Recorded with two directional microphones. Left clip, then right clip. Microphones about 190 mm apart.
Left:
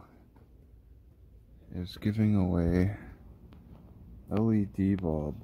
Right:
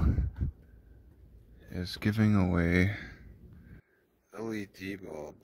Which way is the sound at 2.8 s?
10° right (ahead or behind).